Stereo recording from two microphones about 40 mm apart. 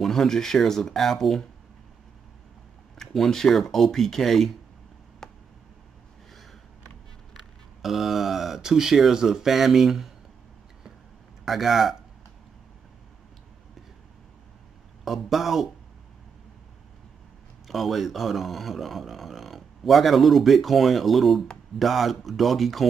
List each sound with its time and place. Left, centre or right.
0.0 s speech: centre
3.0 s speech: centre
5.2 s a sound: centre
7.3 s speech: centre
11.4 s speech: centre
15.0 s speech: centre
17.6 s speech: centre